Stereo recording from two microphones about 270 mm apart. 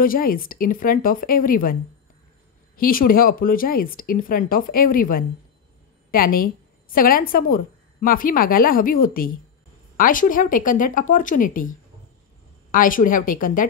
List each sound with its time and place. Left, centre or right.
0.0 s a woman's voice: left
12.7 s a woman's voice: left